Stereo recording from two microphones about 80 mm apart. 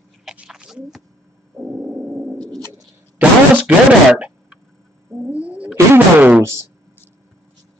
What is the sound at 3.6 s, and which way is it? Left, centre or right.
Speech, centre.